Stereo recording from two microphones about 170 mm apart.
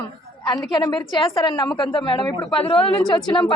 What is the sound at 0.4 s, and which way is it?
A woman's voice, 25° left (ahead or behind).